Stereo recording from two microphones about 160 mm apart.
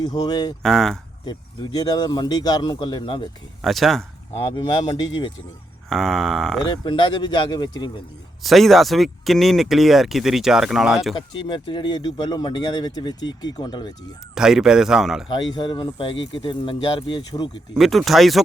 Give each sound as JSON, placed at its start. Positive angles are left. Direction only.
{"t": 0.0, "sound": "speech", "side_deg": 25}
{"t": 0.6, "sound": "speech", "side_deg": 0}
{"t": 1.2, "sound": "speech", "side_deg": 25}
{"t": 3.6, "sound": "speech", "side_deg": 0}
{"t": 4.5, "sound": "speech", "side_deg": 30}
{"t": 5.9, "sound": "speech", "side_deg": 0}
{"t": 6.7, "sound": "speech", "side_deg": 30}
{"t": 8.4, "sound": "speech", "side_deg": 0}
{"t": 11.3, "sound": "speech", "side_deg": 30}
{"t": 14.3, "sound": "speech", "side_deg": -5}
{"t": 15.3, "sound": "speech", "side_deg": 30}
{"t": 17.7, "sound": "speech", "side_deg": 0}